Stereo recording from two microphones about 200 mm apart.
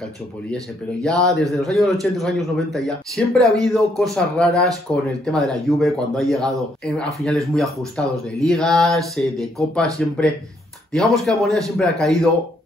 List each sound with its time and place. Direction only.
1.0 s a man's voice: 5° left (ahead or behind)